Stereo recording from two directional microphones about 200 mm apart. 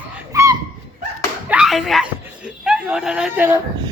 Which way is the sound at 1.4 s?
5° right (ahead or behind).